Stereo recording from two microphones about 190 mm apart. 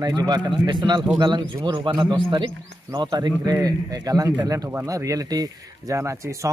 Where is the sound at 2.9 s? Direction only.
20° right (ahead or behind).